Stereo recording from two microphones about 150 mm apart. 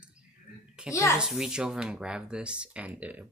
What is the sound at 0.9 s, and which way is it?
Speech, 20° left (ahead or behind).